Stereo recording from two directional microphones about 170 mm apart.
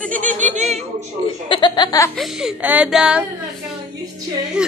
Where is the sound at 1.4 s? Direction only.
30° left (ahead or behind).